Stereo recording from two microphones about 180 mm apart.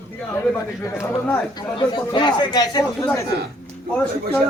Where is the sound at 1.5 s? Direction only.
25° left (ahead or behind).